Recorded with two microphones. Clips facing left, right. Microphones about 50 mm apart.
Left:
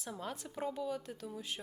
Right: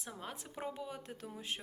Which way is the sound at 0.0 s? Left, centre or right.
Centre.